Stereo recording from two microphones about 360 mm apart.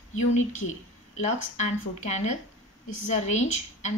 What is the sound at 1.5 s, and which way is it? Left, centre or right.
Speech, centre.